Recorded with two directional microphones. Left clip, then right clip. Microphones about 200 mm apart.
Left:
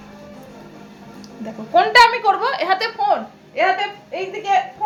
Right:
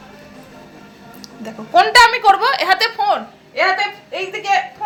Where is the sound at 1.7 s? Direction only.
5° left (ahead or behind).